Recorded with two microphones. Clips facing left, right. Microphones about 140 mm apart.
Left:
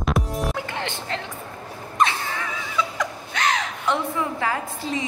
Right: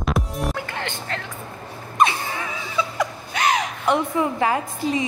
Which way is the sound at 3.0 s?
10° right (ahead or behind).